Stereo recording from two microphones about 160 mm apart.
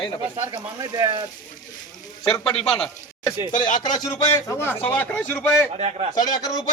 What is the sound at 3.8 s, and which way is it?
Speech, 25° left (ahead or behind).